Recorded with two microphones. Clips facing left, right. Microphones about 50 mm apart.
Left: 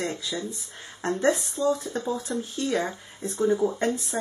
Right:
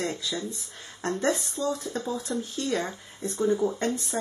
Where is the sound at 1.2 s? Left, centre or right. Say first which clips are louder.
Left 4 dB; centre.